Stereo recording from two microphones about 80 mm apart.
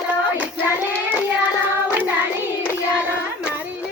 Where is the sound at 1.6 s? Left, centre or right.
Right.